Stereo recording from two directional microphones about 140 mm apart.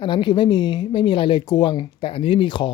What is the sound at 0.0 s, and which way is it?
Speech, 35° left (ahead or behind).